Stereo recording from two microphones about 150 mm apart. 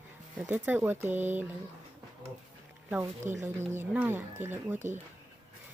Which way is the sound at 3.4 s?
15° right (ahead or behind).